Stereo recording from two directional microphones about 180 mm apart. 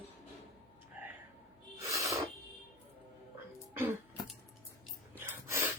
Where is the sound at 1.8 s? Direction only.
15° right (ahead or behind).